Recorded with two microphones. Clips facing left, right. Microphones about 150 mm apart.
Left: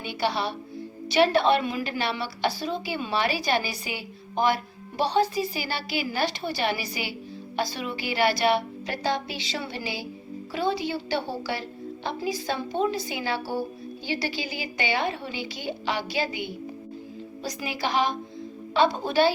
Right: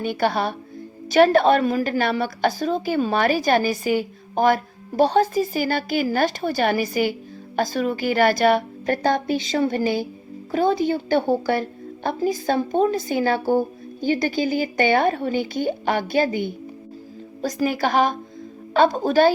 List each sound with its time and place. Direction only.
0.0 s a woman's voice: 45° right (ahead or behind)